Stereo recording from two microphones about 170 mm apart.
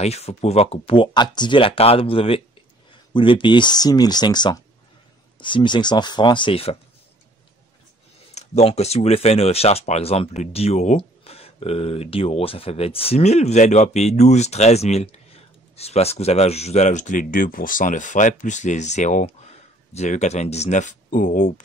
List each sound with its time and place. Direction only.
0.0 s speech: 40° left (ahead or behind)
8.4 s speech: 40° left (ahead or behind)